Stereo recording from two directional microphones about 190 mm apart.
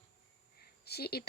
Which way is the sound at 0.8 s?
55° left (ahead or behind).